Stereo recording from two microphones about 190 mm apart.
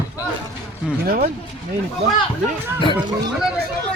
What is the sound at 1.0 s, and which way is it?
Speech, 50° right (ahead or behind).